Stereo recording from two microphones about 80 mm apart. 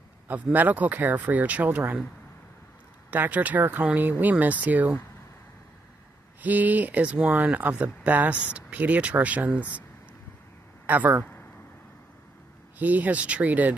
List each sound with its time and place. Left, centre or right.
0.3 s speech: right
3.1 s speech: right
6.4 s speech: right
10.9 s speech: right
12.7 s speech: right